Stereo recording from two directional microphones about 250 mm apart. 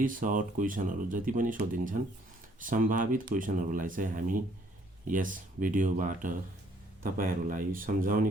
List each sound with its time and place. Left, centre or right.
0.0 s speech: right